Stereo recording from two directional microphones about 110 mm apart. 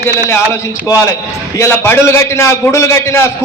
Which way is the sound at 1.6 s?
20° left (ahead or behind).